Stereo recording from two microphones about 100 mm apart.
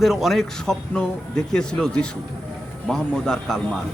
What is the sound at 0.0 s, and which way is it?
A man's voice, centre (ahead or behind).